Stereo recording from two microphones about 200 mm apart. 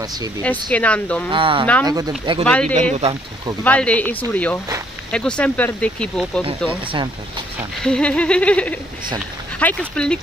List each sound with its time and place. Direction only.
0.0 s speech: 20° right (ahead or behind)
0.4 s speech: 5° left (ahead or behind)
1.3 s speech: 25° right (ahead or behind)
2.4 s speech: 5° left (ahead or behind)
2.7 s speech: 35° right (ahead or behind)
3.6 s speech: 5° left (ahead or behind)
7.8 s speech: 5° left (ahead or behind)